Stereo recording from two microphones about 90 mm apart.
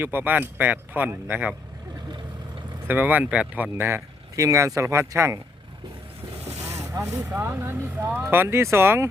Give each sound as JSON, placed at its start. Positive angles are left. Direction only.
{"t": 0.0, "sound": "speech", "side_deg": -20}
{"t": 2.8, "sound": "speech", "side_deg": -20}
{"t": 6.6, "sound": "boat", "side_deg": -35}
{"t": 7.3, "sound": "speech", "side_deg": -25}